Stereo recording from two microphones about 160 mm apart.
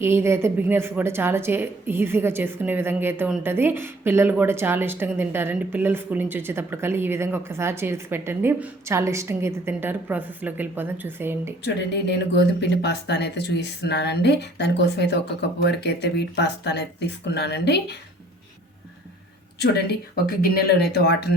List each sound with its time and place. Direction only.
0.0 s a woman's voice: 15° right (ahead or behind)
11.6 s speech: 90° left
19.5 s speech: 90° left